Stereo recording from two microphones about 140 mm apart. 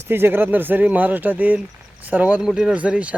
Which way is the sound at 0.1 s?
15° right (ahead or behind).